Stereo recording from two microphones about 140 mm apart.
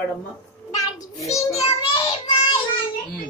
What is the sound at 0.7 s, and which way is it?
Child singing, 20° left (ahead or behind).